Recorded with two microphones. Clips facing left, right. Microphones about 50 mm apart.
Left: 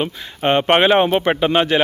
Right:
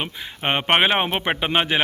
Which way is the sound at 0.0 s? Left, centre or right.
Centre.